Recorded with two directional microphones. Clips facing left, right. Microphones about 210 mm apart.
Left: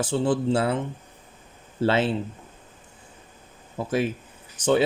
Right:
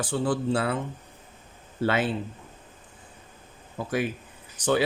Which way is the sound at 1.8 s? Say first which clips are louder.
Left 3 dB; 25° left (ahead or behind).